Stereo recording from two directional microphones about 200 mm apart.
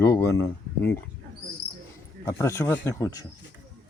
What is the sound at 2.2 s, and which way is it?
Speech, 15° left (ahead or behind).